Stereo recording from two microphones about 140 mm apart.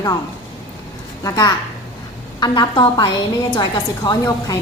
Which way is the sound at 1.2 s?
25° left (ahead or behind).